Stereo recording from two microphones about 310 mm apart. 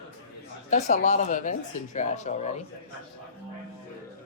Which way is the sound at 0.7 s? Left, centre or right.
Left.